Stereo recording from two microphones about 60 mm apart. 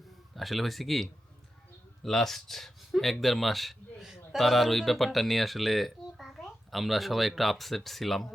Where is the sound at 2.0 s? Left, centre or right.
Centre.